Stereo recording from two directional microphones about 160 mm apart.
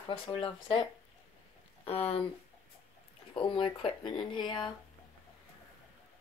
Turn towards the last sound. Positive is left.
turn(degrees=30)  # may be behind; listen again after turning